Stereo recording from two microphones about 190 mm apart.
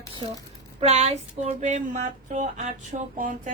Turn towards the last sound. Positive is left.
turn(degrees=-45)  # may be behind; listen again after turning